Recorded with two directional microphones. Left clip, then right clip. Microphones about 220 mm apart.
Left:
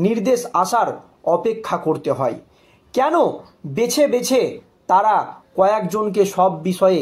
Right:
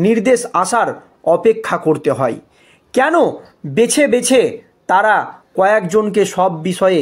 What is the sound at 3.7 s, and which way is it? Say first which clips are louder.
A man's voice: right 4 dB; 40° right (ahead or behind).